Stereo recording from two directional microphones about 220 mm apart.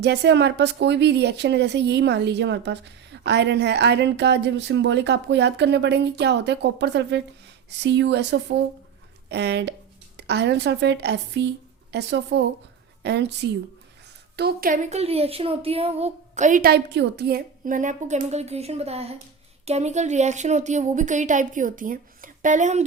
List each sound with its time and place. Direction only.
0.0 s a woman's voice: 50° right (ahead or behind); by 22.8 s 35° right (ahead or behind)